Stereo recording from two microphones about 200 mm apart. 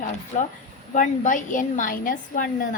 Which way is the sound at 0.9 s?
40° left (ahead or behind).